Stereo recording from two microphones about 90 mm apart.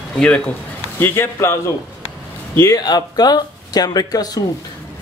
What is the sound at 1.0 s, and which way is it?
Speech, 25° left (ahead or behind).